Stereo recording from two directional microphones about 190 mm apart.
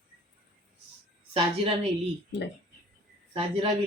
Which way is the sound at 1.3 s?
30° right (ahead or behind).